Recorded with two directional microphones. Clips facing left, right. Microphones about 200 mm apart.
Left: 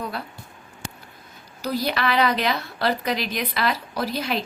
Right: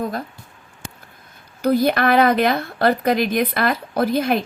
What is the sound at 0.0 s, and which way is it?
Speech, 45° right (ahead or behind).